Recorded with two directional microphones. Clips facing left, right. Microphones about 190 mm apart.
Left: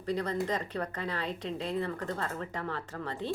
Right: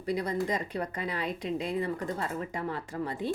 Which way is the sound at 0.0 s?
10° right (ahead or behind).